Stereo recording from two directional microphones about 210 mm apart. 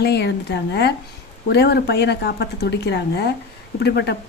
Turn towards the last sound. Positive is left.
turn(degrees=50)  # may be behind; listen again after turning